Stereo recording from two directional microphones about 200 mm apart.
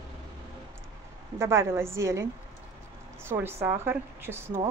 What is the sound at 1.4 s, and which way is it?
Speech, 15° right (ahead or behind).